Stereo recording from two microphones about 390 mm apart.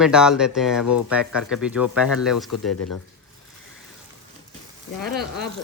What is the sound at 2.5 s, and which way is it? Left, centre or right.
Speech, left.